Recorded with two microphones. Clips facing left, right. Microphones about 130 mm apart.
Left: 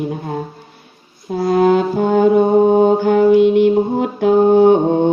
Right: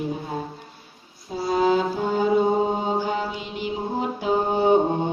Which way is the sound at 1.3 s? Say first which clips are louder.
Left 7 dB; 60° left (ahead or behind).